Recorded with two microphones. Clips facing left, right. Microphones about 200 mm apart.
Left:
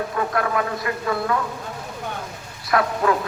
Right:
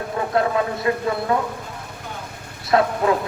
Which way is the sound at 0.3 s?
25° right (ahead or behind).